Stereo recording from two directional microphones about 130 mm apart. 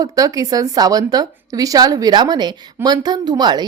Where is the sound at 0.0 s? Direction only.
30° right (ahead or behind).